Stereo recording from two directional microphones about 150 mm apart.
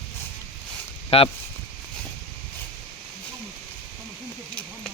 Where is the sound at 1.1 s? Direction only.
40° left (ahead or behind).